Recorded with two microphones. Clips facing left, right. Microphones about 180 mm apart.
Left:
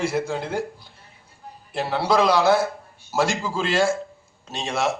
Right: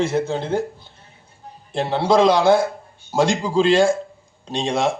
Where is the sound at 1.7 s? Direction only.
25° right (ahead or behind).